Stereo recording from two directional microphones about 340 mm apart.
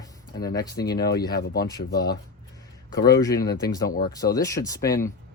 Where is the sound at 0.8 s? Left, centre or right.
Left.